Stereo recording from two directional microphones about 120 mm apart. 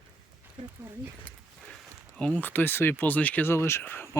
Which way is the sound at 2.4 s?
15° left (ahead or behind).